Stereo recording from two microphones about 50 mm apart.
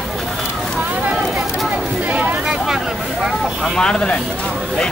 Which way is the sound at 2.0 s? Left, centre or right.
Right.